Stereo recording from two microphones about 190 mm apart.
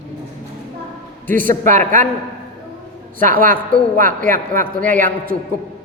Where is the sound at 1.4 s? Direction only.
40° right (ahead or behind).